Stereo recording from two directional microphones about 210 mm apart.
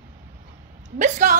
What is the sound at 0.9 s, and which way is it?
Speech, 35° right (ahead or behind).